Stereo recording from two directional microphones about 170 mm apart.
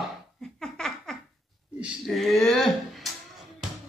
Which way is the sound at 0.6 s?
5° left (ahead or behind).